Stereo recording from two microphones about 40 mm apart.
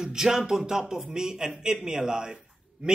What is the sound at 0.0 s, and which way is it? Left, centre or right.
A man's voice, centre.